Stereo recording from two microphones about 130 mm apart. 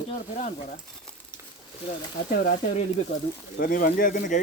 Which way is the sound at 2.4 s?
90° left.